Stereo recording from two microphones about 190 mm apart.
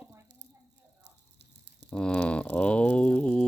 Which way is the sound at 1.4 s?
65° right (ahead or behind).